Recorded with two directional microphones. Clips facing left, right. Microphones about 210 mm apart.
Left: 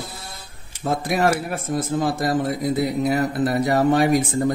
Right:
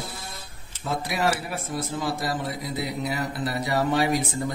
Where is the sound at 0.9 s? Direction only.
50° left (ahead or behind).